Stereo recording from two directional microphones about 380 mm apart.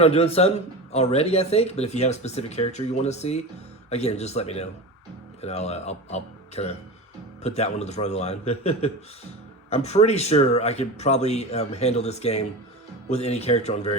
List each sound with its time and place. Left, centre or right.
0.0 s speech: centre